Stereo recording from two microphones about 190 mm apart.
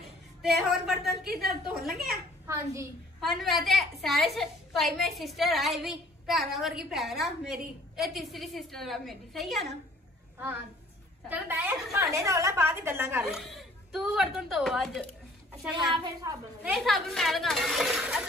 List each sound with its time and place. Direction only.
0.4 s a woman's voice: centre (ahead or behind)
1.2 s a woman's voice: 55° right (ahead or behind)
1.7 s a woman's voice: centre (ahead or behind)
2.4 s a woman's voice: 15° right (ahead or behind)
3.2 s a woman's voice: centre (ahead or behind)
11.2 s a woman's voice: 10° right (ahead or behind)
13.2 s a woman's voice: centre (ahead or behind)
16.0 s a woman's voice: 20° right (ahead or behind)
16.7 s a woman's voice: centre (ahead or behind)